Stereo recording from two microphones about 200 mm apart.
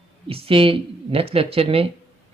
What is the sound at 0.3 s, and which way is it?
Speech, 30° right (ahead or behind).